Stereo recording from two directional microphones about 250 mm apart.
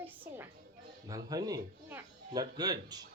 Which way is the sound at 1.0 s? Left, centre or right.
Centre.